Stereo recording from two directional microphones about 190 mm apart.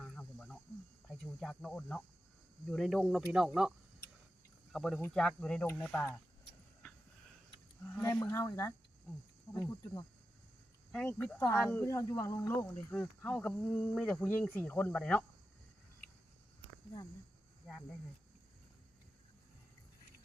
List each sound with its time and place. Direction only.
0.0 s cricket: 5° left (ahead or behind)
1.2 s speech: 5° left (ahead or behind)
8.0 s speech: 15° left (ahead or behind)
11.3 s speech: 20° left (ahead or behind)